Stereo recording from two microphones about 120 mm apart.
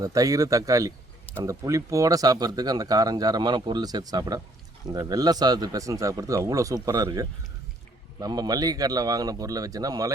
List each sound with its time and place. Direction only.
0.0 s a man's voice: 30° right (ahead or behind)